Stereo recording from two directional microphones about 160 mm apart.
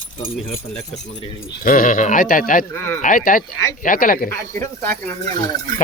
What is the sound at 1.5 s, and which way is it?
Speech, 60° left (ahead or behind).